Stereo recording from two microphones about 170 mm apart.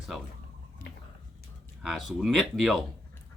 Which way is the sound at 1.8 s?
5° right (ahead or behind).